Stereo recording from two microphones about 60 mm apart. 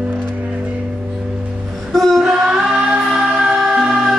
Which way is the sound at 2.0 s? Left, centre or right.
Centre.